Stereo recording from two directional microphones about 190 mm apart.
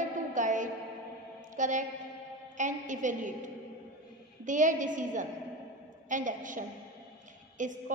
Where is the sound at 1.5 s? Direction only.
40° right (ahead or behind).